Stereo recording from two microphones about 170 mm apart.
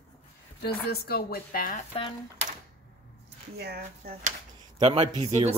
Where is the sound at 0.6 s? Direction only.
70° left (ahead or behind).